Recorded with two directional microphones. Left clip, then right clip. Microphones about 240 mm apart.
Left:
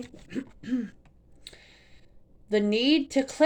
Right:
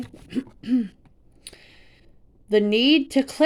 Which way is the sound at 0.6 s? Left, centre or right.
Right.